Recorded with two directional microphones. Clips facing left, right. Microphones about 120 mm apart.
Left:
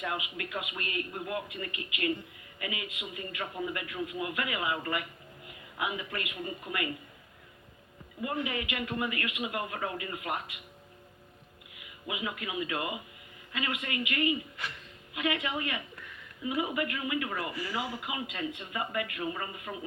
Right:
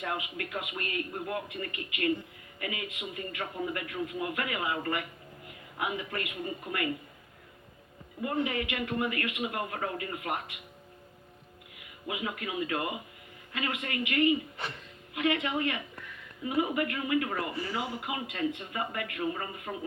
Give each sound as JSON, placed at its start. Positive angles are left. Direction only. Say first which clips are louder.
{"t": 0.0, "sound": "a man's voice", "louder": "right 1 dB", "side_deg": -40}
{"t": 8.4, "sound": "a man's voice", "louder": "right 5 dB", "side_deg": -40}
{"t": 12.0, "sound": "a man's voice", "louder": "right 1 dB", "side_deg": -45}
{"t": 17.3, "sound": "speech", "louder": "right 1 dB", "side_deg": -25}
{"t": 18.0, "sound": "a man's voice", "louder": "right 3 dB", "side_deg": -45}